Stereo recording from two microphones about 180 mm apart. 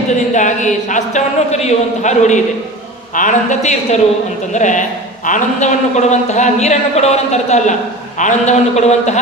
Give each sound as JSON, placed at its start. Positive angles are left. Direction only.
{"t": 0.3, "sound": "a man's voice", "side_deg": 40}